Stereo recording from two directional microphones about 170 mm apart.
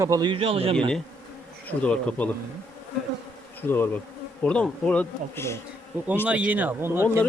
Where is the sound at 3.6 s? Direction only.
10° left (ahead or behind).